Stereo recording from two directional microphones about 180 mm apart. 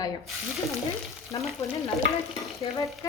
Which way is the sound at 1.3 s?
25° left (ahead or behind).